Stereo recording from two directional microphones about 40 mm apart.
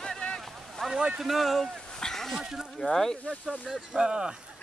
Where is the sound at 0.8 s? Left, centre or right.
Centre.